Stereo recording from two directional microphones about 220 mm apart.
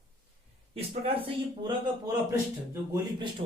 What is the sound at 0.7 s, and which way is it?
A man's voice, 25° right (ahead or behind).